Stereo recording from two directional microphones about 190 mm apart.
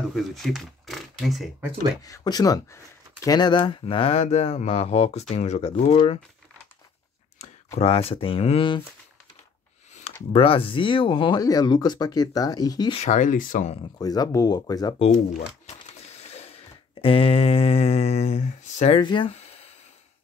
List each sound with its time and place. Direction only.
0.1 s speech: centre (ahead or behind)
2.0 s speech: 20° left (ahead or behind)
7.3 s speech: 35° left (ahead or behind)
10.3 s speech: 30° left (ahead or behind)
13.0 s speech: 40° left (ahead or behind)
13.9 s speech: 20° left (ahead or behind)
15.0 s speech: 35° left (ahead or behind)
16.2 s a sound: 35° left (ahead or behind)